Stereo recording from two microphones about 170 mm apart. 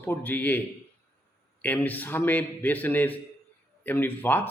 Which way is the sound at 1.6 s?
10° left (ahead or behind).